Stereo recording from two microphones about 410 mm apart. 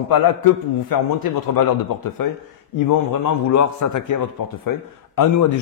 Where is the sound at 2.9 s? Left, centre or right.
Left.